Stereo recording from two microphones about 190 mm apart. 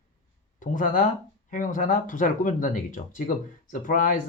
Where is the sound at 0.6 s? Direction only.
45° left (ahead or behind).